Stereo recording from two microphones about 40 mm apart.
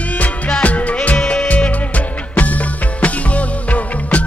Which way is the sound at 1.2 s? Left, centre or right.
Left.